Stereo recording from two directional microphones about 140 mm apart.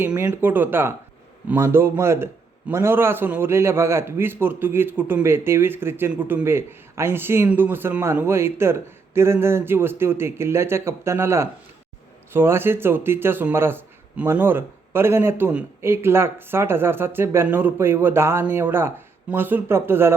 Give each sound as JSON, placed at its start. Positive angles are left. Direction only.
{"t": 0.2, "sound": "a man's voice", "side_deg": -15}